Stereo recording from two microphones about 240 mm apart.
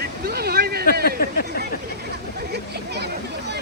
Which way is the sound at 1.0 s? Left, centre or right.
Left.